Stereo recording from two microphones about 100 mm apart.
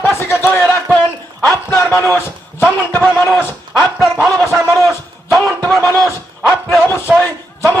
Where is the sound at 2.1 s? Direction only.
20° left (ahead or behind).